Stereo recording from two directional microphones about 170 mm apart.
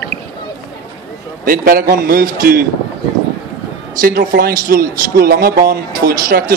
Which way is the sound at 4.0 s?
60° right (ahead or behind).